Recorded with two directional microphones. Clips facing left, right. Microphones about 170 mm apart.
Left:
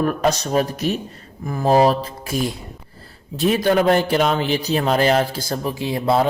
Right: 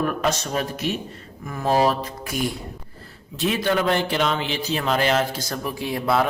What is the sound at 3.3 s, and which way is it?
Speech, 40° left (ahead or behind).